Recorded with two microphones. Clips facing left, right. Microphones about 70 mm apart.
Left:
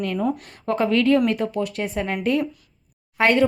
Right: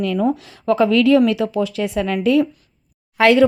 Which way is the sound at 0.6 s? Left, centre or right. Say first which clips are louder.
Right 5 dB; right.